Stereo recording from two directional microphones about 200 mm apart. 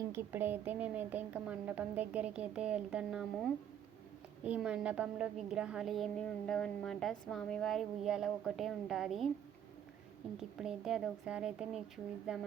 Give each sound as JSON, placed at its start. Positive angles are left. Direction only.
{"t": 0.1, "sound": "a woman's voice", "side_deg": -10}
{"t": 10.6, "sound": "a woman's voice", "side_deg": 0}